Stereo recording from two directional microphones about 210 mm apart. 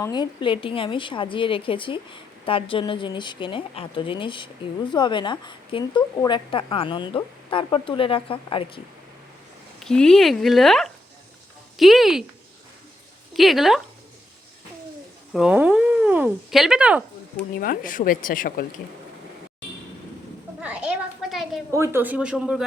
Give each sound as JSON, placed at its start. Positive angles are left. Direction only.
{"t": 0.0, "sound": "speech", "side_deg": 20}
{"t": 9.8, "sound": "speech", "side_deg": 5}
{"t": 13.3, "sound": "speech", "side_deg": 0}
{"t": 15.3, "sound": "speech", "side_deg": -5}
{"t": 17.6, "sound": "a woman's voice", "side_deg": 40}
{"t": 20.6, "sound": "a sound", "side_deg": -5}
{"t": 21.7, "sound": "speech", "side_deg": -10}